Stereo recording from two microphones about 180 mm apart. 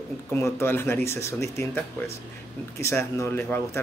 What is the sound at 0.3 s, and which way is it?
Speech, 15° left (ahead or behind).